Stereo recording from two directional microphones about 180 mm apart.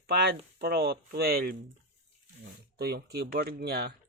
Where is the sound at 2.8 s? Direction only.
60° right (ahead or behind).